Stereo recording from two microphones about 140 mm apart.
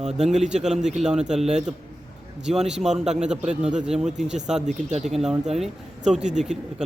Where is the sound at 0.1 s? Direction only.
5° right (ahead or behind).